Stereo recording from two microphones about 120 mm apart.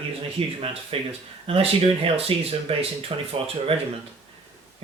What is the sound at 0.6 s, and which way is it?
Speech, 50° right (ahead or behind).